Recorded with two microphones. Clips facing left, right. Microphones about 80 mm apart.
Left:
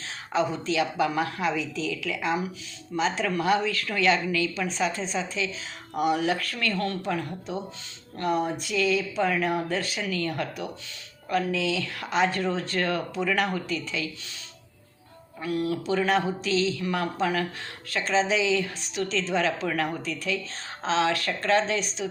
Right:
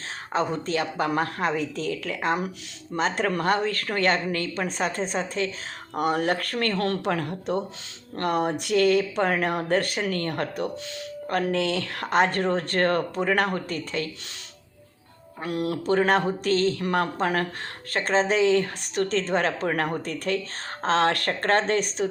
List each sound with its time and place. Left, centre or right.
0.3 s speech: right
6.7 s speech: right
15.4 s speech: right